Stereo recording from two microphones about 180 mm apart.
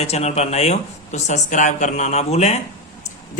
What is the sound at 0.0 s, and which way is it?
A man's voice, 35° left (ahead or behind).